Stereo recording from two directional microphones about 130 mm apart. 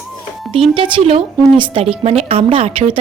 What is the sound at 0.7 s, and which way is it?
A woman's voice, 45° right (ahead or behind).